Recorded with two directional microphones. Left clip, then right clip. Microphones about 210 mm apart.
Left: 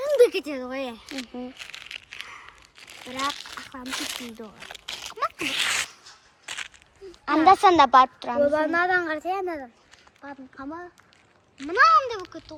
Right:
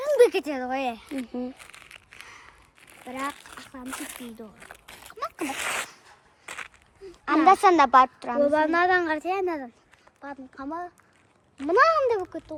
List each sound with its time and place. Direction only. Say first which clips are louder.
0.0 s speech: even; 25° right (ahead or behind)
1.0 s a woman's voice: right 1 dB; 5° left (ahead or behind)
1.3 s crumpling: right 1 dB; 5° right (ahead or behind)
2.8 s speech: left 4 dB; 10° left (ahead or behind)
4.9 s a sound: left 7 dB; 15° left (ahead or behind)
5.5 s sneeze: left 5 dB; 15° right (ahead or behind)
6.1 s a sound: left 3 dB; 30° right (ahead or behind)
7.4 s a woman's voice: left 2 dB; 5° left (ahead or behind)
8.4 s a woman's voice: right 2 dB; 45° right (ahead or behind)
10.2 s speech: right 1 dB; 15° right (ahead or behind)
11.5 s speech: left 2 dB; 25° right (ahead or behind)